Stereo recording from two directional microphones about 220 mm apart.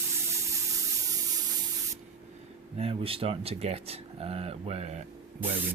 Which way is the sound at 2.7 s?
25° right (ahead or behind).